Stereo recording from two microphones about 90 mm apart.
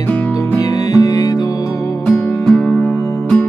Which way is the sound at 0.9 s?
45° left (ahead or behind).